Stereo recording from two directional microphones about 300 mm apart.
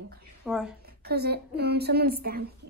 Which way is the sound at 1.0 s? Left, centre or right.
Right.